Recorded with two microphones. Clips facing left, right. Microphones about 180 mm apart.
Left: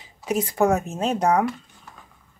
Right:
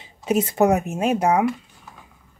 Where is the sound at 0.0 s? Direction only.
25° right (ahead or behind).